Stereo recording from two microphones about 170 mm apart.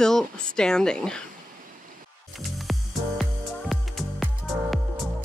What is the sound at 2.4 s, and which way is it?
Music, centre (ahead or behind).